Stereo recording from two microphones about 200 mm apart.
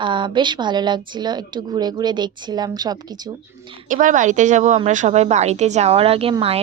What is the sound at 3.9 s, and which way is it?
A woman's voice, 40° right (ahead or behind).